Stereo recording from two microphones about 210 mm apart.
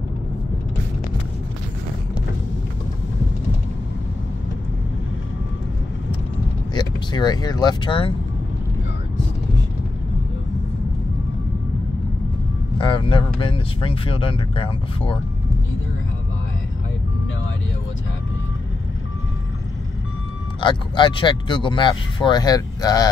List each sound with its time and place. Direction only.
6.7 s speech: 20° left (ahead or behind)
12.7 s speech: 25° left (ahead or behind)
20.6 s speech: 20° left (ahead or behind)